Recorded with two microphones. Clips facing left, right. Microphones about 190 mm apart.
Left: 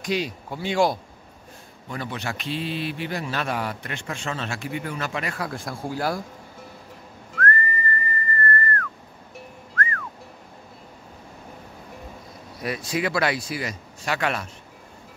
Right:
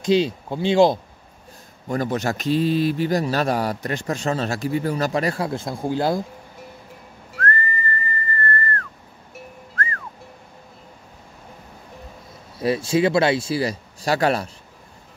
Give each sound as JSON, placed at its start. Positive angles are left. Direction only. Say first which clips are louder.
{"t": 0.0, "sound": "speech", "louder": "right 8 dB", "side_deg": -25}
{"t": 1.9, "sound": "a man's voice", "louder": "right 8 dB", "side_deg": -45}
{"t": 7.3, "sound": "whistling", "louder": "even", "side_deg": -30}
{"t": 8.3, "sound": "whistle", "louder": "even", "side_deg": -30}
{"t": 9.8, "sound": "music", "louder": "left 1 dB", "side_deg": -30}
{"t": 12.5, "sound": "speech", "louder": "right 8 dB", "side_deg": -30}